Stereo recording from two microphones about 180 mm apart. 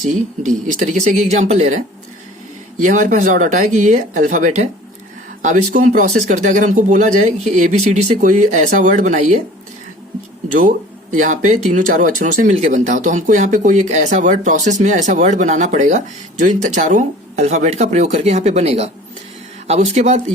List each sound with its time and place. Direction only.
0.4 s speech: 45° right (ahead or behind)
10.6 s speech: 45° right (ahead or behind)